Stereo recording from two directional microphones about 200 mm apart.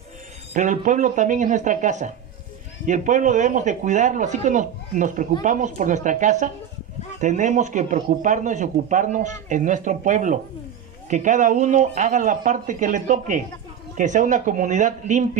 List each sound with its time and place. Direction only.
0.5 s speech: 40° right (ahead or behind)